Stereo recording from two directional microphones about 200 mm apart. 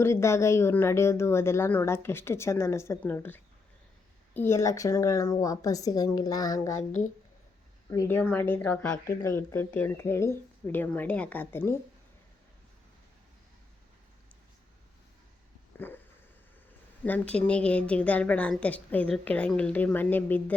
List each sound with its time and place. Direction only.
0.0 s a woman's voice: 15° left (ahead or behind)
7.9 s a woman's voice: 15° left (ahead or behind)
15.7 s a sound: 10° left (ahead or behind)
17.0 s a woman's voice: 5° left (ahead or behind)